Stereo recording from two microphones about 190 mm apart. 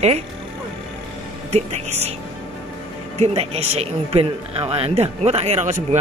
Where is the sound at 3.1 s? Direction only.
35° right (ahead or behind).